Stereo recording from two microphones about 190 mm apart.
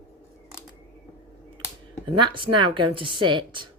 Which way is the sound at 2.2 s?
25° right (ahead or behind).